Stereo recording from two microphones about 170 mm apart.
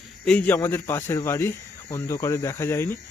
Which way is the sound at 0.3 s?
10° left (ahead or behind).